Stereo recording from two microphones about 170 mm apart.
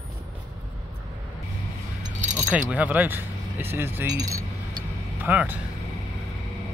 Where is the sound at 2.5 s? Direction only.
10° right (ahead or behind).